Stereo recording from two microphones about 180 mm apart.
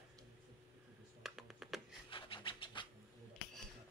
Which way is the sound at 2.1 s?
30° left (ahead or behind).